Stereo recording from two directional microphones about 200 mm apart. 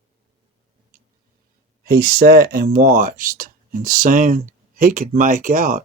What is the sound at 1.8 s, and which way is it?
Speech, 50° right (ahead or behind).